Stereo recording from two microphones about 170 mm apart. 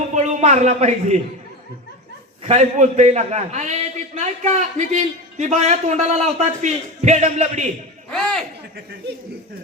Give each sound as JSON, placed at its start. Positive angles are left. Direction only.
{"t": 0.1, "sound": "speech", "side_deg": -40}
{"t": 2.5, "sound": "a man's voice", "side_deg": -45}
{"t": 8.1, "sound": "a sound", "side_deg": 5}